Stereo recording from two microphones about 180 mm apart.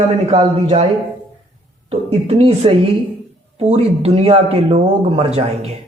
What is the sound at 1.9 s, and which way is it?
Speech, 30° right (ahead or behind).